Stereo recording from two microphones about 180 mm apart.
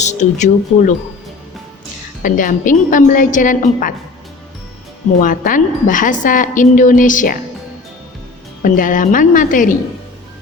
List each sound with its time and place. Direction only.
0.0 s speech: 40° left (ahead or behind)
2.2 s a woman's voice: 50° left (ahead or behind)
5.2 s a woman's voice: 50° left (ahead or behind)
8.6 s a woman's voice: 50° left (ahead or behind)